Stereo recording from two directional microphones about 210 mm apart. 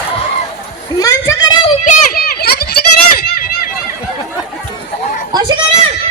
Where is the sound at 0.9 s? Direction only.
15° left (ahead or behind).